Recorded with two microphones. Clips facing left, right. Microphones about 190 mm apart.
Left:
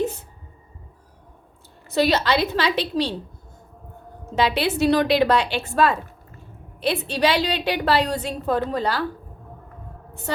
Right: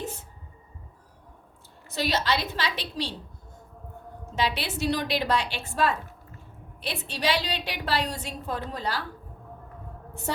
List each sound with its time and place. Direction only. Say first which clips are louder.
1.9 s a woman's voice: left 7 dB; 65° left (ahead or behind)
4.4 s a woman's voice: left 8 dB; 65° left (ahead or behind)